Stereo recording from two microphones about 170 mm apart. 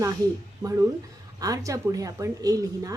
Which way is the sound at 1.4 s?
20° right (ahead or behind).